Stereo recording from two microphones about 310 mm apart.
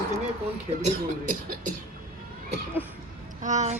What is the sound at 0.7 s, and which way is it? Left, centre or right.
Speech, centre.